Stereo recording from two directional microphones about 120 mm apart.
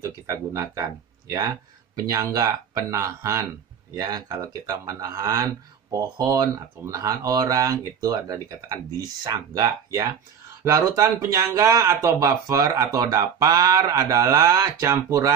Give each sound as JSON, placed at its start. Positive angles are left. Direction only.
{"t": 0.0, "sound": "speech", "side_deg": -25}